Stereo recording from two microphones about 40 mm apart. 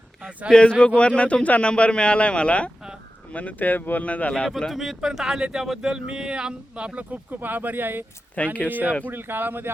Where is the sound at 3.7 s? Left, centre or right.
Left.